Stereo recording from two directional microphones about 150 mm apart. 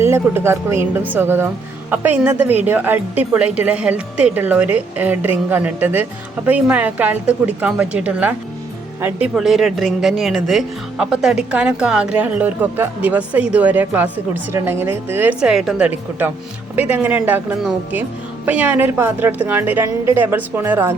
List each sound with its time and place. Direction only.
0.0 s a woman's voice: 15° right (ahead or behind)